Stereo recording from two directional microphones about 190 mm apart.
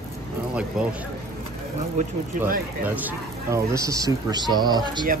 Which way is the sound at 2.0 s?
40° right (ahead or behind).